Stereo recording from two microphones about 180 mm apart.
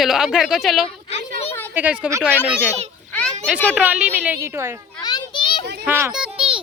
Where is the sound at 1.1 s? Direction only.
35° left (ahead or behind).